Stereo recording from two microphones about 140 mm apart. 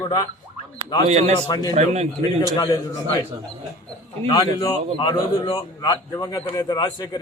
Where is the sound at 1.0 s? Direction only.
50° right (ahead or behind).